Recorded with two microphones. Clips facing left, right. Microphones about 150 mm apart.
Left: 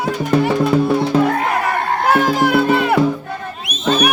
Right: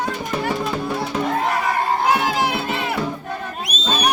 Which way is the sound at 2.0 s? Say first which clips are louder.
Left 4 dB; 50° left (ahead or behind).